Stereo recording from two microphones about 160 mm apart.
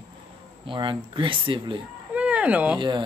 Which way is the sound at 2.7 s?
30° right (ahead or behind).